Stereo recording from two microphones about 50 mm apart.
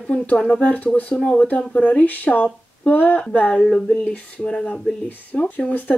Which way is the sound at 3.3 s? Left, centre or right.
Left.